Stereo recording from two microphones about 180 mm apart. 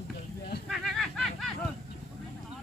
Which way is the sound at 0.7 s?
Centre (ahead or behind).